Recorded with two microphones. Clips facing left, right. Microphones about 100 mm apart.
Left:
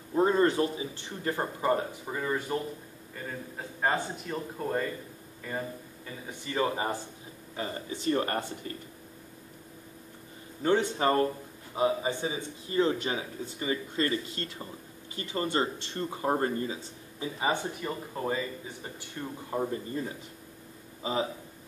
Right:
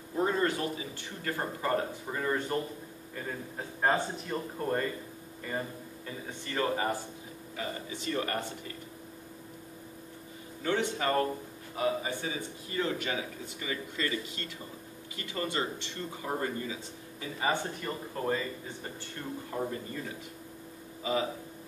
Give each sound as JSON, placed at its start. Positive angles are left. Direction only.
{"t": 0.1, "sound": "a man's voice", "side_deg": 30}
{"t": 6.4, "sound": "a man's voice", "side_deg": 15}
{"t": 7.5, "sound": "speech", "side_deg": 35}
{"t": 10.6, "sound": "a man's voice", "side_deg": 35}
{"t": 17.2, "sound": "a man's voice", "side_deg": 15}